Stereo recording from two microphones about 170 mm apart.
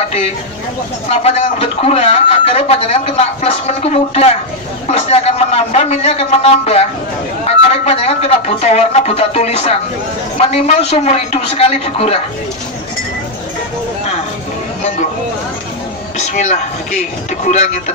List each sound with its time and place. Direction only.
1.0 s a man's voice: 35° left (ahead or behind)
16.2 s a man's voice: 45° left (ahead or behind)